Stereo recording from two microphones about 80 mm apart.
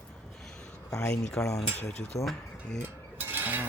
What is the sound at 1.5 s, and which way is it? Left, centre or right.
Speech, left.